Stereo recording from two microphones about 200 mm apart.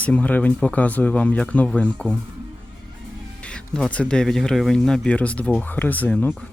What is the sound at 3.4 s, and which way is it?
Speech, 5° left (ahead or behind).